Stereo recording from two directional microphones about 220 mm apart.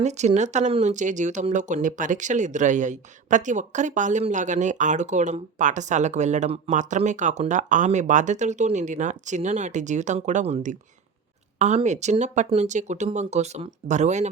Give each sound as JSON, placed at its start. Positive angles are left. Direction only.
{"t": 0.0, "sound": "speech", "side_deg": -30}